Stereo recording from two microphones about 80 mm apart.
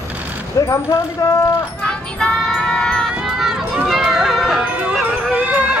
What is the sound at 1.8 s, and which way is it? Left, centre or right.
Music, centre.